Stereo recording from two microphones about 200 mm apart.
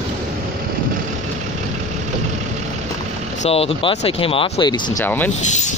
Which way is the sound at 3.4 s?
30° left (ahead or behind).